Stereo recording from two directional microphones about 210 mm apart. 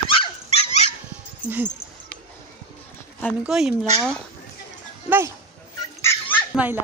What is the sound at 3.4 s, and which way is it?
Speech, 5° right (ahead or behind).